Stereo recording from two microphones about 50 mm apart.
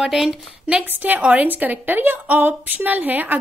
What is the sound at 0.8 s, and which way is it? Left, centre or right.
A woman's voice, right.